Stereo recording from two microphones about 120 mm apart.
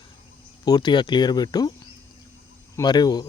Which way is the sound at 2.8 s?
35° left (ahead or behind).